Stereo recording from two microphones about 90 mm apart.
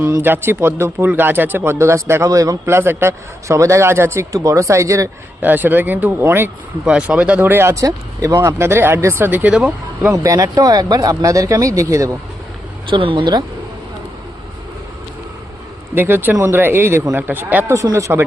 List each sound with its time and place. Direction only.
0.0 s speech: 25° right (ahead or behind)
5.4 s speech: 20° right (ahead or behind)
6.8 s speech: 10° right (ahead or behind); by 8.4 s 40° right (ahead or behind)
8.4 s speech: 30° right (ahead or behind)
10.1 s speech: 35° right (ahead or behind)
12.9 s speech: 70° right (ahead or behind)
16.0 s speech: 25° right (ahead or behind)
17.7 s speech: 35° right (ahead or behind)